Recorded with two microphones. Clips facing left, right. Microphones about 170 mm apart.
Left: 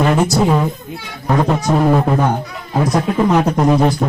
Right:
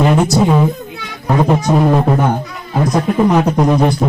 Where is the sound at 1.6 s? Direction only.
Centre (ahead or behind).